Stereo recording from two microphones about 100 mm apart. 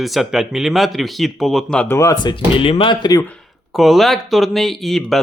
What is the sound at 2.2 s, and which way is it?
Speech, 60° left (ahead or behind).